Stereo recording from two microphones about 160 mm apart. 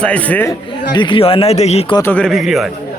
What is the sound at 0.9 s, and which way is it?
Speech, 30° left (ahead or behind).